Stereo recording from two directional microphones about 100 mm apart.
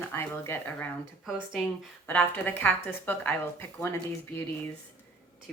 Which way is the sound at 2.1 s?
20° left (ahead or behind).